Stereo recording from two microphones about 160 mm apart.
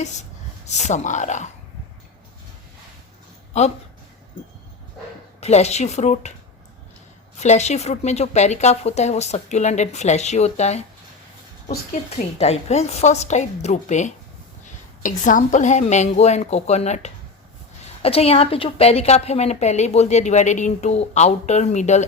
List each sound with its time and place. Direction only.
0.0 s speech: 45° left (ahead or behind)
5.4 s a woman's voice: 45° left (ahead or behind)
7.3 s a woman's voice: 45° left (ahead or behind)
12.1 s a woman's voice: 45° left (ahead or behind)